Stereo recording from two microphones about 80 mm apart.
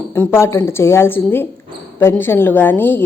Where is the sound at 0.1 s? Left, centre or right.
Left.